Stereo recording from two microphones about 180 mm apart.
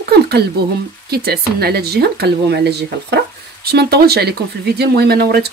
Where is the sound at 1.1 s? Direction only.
60° right (ahead or behind).